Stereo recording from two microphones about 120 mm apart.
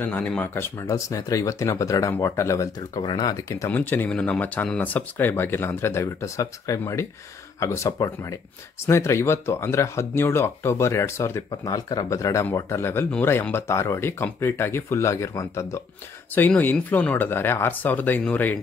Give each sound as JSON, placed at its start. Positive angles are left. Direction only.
{"t": 0.0, "sound": "speech", "side_deg": 15}
{"t": 3.7, "sound": "speech", "side_deg": 15}